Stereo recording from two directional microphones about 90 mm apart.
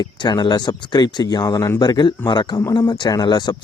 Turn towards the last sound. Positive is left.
turn(degrees=50)  # may be behind; listen again after turning